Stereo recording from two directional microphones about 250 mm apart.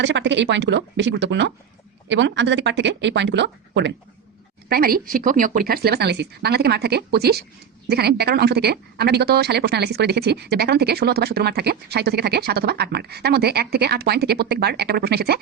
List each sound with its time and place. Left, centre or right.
0.0 s speech: right